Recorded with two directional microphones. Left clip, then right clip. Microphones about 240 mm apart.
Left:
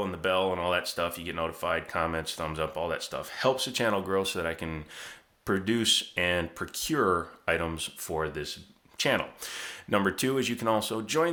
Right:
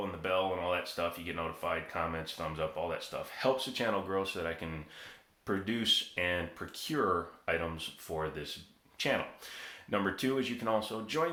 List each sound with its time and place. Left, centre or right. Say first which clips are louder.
0.0 s speech: left 5 dB; left